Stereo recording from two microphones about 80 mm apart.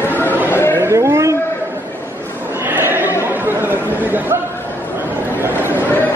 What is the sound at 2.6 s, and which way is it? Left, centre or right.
Chatter, right.